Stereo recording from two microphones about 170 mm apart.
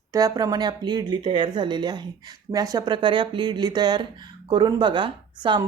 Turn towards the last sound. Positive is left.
turn(degrees=-30)  # may be behind; listen again after turning